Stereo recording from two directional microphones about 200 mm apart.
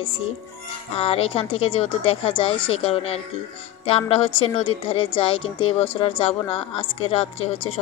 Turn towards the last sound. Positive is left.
turn(degrees=30)  # may be behind; listen again after turning